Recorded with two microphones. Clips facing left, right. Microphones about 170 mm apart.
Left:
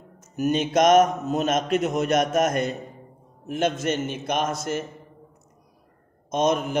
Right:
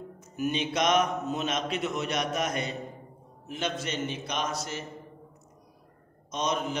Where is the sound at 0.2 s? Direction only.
45° left (ahead or behind).